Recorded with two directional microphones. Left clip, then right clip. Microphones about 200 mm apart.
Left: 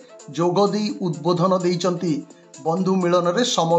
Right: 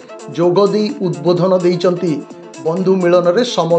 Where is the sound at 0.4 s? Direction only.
10° right (ahead or behind).